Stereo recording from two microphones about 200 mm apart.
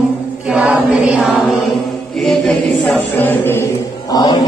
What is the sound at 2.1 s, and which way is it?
Chant, centre (ahead or behind).